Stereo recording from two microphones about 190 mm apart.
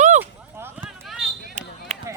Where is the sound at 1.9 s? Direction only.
35° right (ahead or behind).